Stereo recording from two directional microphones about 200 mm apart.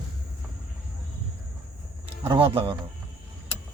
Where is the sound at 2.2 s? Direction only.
25° right (ahead or behind).